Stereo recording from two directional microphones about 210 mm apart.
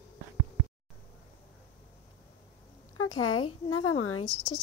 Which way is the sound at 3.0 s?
90° left.